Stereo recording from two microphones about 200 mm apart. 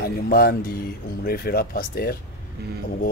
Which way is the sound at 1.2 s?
50° left (ahead or behind).